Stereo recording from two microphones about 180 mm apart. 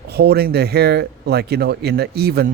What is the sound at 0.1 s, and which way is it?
A man's voice, 65° right (ahead or behind).